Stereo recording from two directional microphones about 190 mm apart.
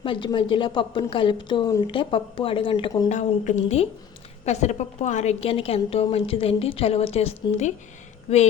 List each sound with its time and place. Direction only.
0.0 s a woman's voice: 25° left (ahead or behind)
3.1 s a woman's voice: 40° left (ahead or behind)